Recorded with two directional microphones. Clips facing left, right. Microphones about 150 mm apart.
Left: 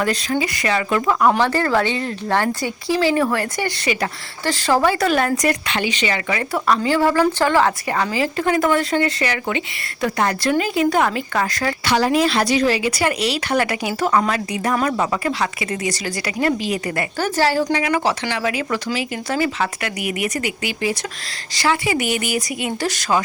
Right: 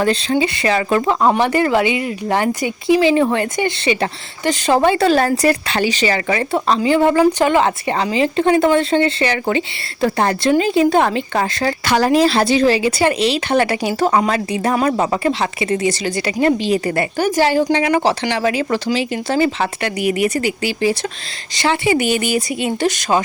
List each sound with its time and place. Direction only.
0.0 s speech: 30° right (ahead or behind)
1.4 s speech: 15° right (ahead or behind)
11.9 s speech: 45° right (ahead or behind); by 17.1 s 30° right (ahead or behind)
17.2 s a woman's voice: 15° right (ahead or behind)
17.6 s speech: 30° right (ahead or behind)